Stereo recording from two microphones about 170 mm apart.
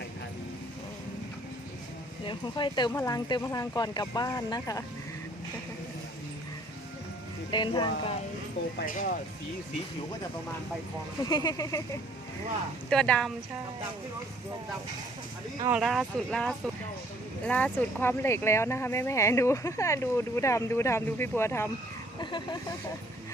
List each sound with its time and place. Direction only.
2.2 s speech: 25° left (ahead or behind)
7.5 s speech: 25° left (ahead or behind)
8.8 s speech: 55° left (ahead or behind)
11.2 s speech: 25° left (ahead or behind)
12.9 s speech: 5° left (ahead or behind)
15.7 s speech: centre (ahead or behind); by 21.7 s 15° left (ahead or behind)
22.2 s speech: 25° left (ahead or behind)